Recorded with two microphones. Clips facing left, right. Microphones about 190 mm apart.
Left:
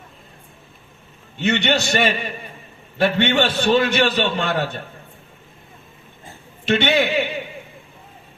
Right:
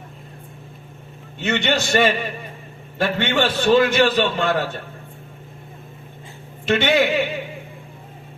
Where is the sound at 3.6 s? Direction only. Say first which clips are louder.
Right 4 dB; 45° right (ahead or behind).